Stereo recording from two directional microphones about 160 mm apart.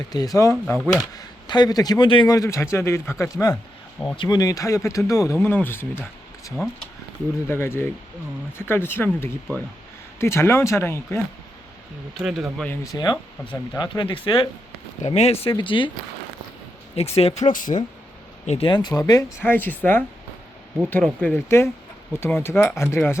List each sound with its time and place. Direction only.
0.1 s a man's voice: 25° left (ahead or behind)
12.2 s speech: centre (ahead or behind)
12.8 s a man's voice: 25° left (ahead or behind)
15.0 s speech: 45° left (ahead or behind)
16.9 s speech: 40° left (ahead or behind)
18.4 s a man's voice: 40° left (ahead or behind)
19.4 s speech: 10° left (ahead or behind)